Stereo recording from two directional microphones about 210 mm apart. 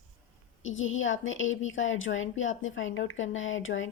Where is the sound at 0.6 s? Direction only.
65° left (ahead or behind).